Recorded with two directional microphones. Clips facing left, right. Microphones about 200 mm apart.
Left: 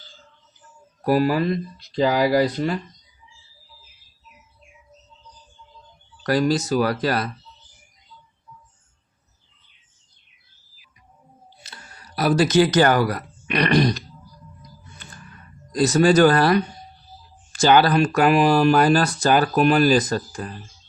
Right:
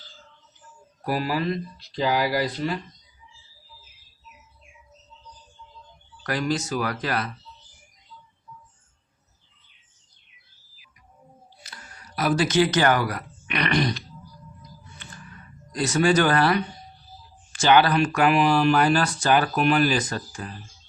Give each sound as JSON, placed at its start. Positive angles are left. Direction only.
{"t": 1.0, "sound": "speech", "side_deg": 45}
{"t": 6.2, "sound": "speech", "side_deg": 40}
{"t": 11.6, "sound": "speech", "side_deg": 30}
{"t": 15.7, "sound": "speech", "side_deg": 40}